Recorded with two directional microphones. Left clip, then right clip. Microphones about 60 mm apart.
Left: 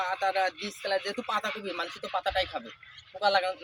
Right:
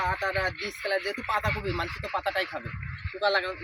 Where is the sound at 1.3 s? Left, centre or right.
Left.